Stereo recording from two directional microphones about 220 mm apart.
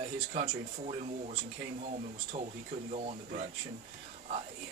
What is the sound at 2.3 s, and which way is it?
Speech, 30° right (ahead or behind).